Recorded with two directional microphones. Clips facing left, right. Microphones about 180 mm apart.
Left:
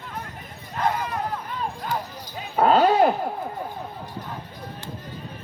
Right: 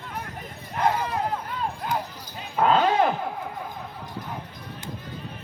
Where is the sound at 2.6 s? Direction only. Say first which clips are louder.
Left 3 dB; 40° left (ahead or behind).